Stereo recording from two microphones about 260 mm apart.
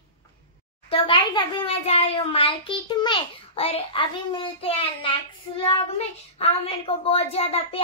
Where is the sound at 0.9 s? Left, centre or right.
Centre.